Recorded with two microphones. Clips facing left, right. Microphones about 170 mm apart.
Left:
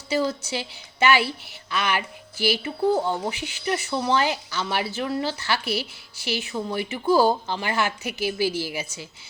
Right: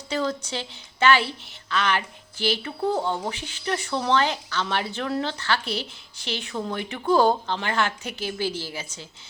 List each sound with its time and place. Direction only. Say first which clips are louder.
0.1 s speech: left 2 dB; 10° left (ahead or behind)